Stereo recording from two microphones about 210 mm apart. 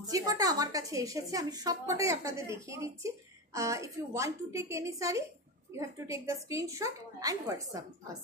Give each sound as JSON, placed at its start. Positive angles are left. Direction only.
{"t": 0.1, "sound": "a woman's voice", "side_deg": -15}